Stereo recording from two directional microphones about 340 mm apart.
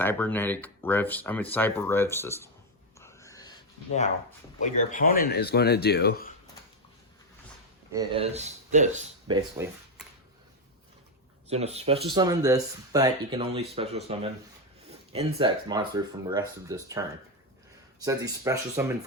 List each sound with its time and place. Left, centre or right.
0.0 s speech: centre
3.0 s a sound: centre
4.6 s speech: left
7.9 s speech: centre
11.4 s speech: centre
18.0 s speech: centre